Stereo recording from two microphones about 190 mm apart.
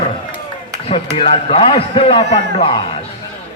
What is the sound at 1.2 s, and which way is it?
A man's voice, 30° left (ahead or behind).